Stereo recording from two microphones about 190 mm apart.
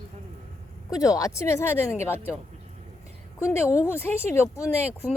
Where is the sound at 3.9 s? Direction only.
10° left (ahead or behind).